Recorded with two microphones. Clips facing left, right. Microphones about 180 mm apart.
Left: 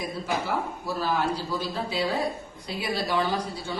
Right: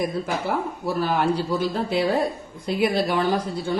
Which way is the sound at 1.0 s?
55° right (ahead or behind).